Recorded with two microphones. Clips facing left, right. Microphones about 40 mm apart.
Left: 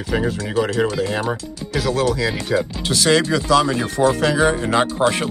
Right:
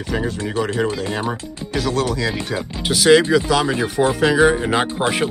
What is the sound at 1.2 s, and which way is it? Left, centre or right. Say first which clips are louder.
Speech: left 1 dB; right.